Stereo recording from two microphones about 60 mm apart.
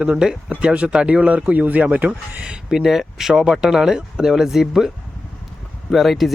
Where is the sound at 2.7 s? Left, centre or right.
Centre.